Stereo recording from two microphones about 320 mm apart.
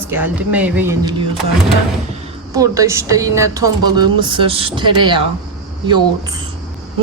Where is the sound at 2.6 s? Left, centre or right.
Centre.